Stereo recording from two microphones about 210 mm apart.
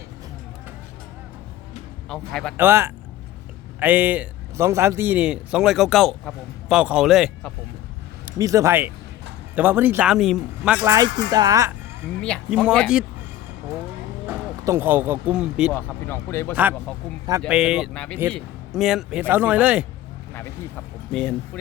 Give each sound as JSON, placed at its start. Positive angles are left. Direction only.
{"t": 2.0, "sound": "a man's voice", "side_deg": 0}
{"t": 2.6, "sound": "a man's voice", "side_deg": -10}
{"t": 8.2, "sound": "speech", "side_deg": -15}
{"t": 10.8, "sound": "speech", "side_deg": -15}
{"t": 12.5, "sound": "a man's voice", "side_deg": -5}
{"t": 14.3, "sound": "speech", "side_deg": -10}
{"t": 15.7, "sound": "speech", "side_deg": 10}
{"t": 17.4, "sound": "a man's voice", "side_deg": -5}
{"t": 21.1, "sound": "a man's voice", "side_deg": 5}